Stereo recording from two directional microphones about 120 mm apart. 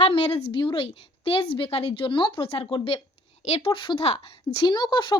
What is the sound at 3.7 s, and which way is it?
Speech, 45° left (ahead or behind).